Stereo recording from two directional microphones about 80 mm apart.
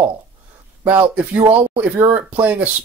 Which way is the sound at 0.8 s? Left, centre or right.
Centre.